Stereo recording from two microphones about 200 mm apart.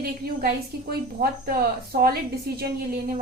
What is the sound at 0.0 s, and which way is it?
A woman's voice, 50° right (ahead or behind).